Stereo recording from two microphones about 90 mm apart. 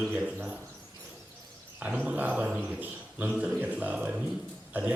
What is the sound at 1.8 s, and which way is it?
A man's voice, 15° right (ahead or behind).